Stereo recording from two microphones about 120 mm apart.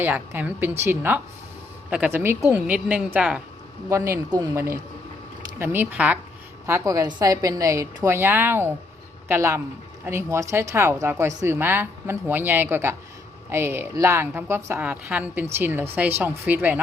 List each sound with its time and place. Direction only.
0.0 s a woman's voice: 15° right (ahead or behind)
3.8 s a woman's voice: 25° right (ahead or behind)
6.7 s a woman's voice: 25° right (ahead or behind)